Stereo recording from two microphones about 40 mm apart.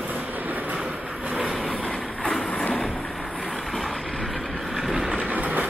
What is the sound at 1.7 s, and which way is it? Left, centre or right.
Train, left.